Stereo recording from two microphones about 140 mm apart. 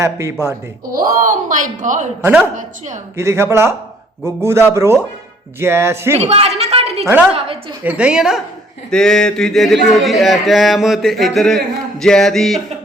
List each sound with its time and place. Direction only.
0.0 s speech: 20° right (ahead or behind)
0.9 s speech: 90° right; by 3.0 s 60° right (ahead or behind)
3.2 s speech: 20° right (ahead or behind)
6.1 s a sound: 45° right (ahead or behind)
7.9 s a woman's voice: 10° right (ahead or behind)